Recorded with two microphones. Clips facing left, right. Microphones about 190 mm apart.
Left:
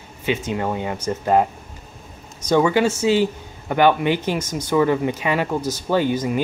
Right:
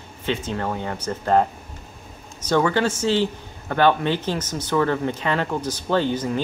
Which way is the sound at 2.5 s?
10° left (ahead or behind).